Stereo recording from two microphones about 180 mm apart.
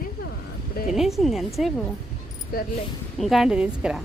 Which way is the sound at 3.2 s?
Centre (ahead or behind).